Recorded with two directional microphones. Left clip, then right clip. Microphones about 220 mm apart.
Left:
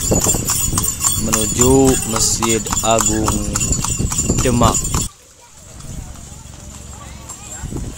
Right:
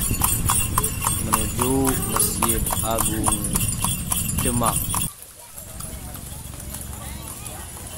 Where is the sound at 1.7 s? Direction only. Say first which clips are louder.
Left 10 dB; 35° left (ahead or behind).